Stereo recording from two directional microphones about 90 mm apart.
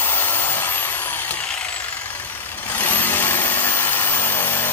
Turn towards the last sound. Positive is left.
turn(degrees=25)  # may be behind; listen again after turning